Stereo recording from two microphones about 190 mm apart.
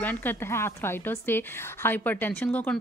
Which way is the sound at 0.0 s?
10° left (ahead or behind).